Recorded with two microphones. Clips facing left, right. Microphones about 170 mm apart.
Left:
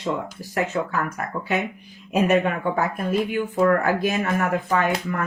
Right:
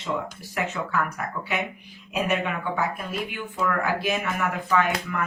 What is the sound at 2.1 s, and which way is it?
Speech, 45° left (ahead or behind).